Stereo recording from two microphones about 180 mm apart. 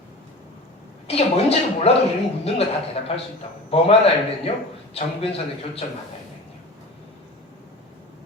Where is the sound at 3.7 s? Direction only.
30° left (ahead or behind).